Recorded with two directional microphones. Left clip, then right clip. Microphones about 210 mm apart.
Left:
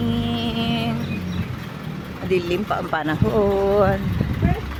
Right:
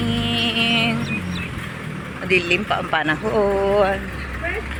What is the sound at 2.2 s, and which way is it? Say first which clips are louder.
Speech: right 3 dB; 20° left (ahead or behind).